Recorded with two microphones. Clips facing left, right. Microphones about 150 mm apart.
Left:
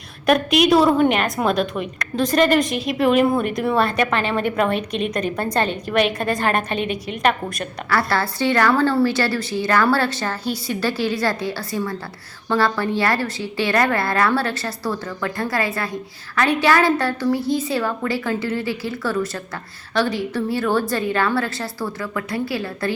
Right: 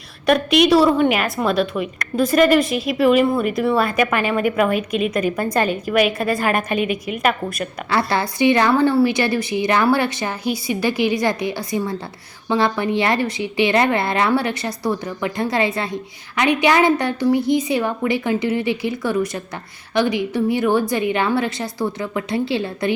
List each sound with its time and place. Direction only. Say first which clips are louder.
0.3 s a woman's voice: right 1 dB; centre (ahead or behind)
7.9 s a woman's voice: right 1 dB; 20° right (ahead or behind)